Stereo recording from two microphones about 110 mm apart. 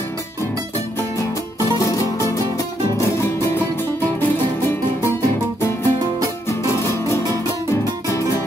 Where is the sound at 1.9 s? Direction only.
30° left (ahead or behind).